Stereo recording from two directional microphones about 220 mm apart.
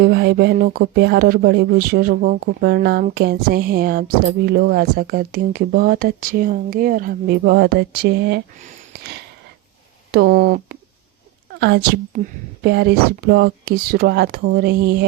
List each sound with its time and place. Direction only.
0.0 s speech: 45° right (ahead or behind)
10.1 s speech: 45° right (ahead or behind)